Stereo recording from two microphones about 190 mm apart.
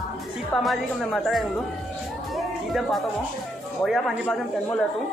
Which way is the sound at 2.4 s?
Centre (ahead or behind).